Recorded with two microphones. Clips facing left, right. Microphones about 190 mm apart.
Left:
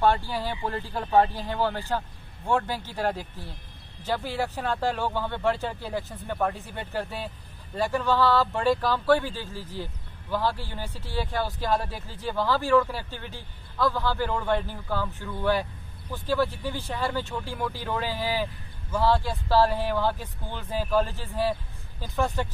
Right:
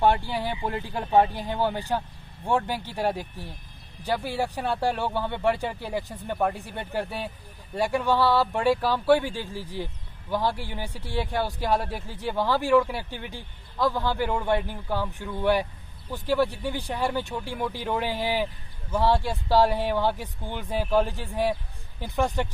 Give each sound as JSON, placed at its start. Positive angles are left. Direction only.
{"t": 0.0, "sound": "speech", "side_deg": -15}